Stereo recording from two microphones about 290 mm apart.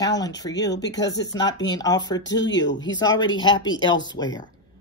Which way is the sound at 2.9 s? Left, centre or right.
Centre.